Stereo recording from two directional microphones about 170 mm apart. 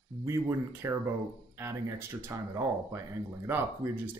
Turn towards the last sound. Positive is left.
turn(degrees=-15)  # may be behind; listen again after turning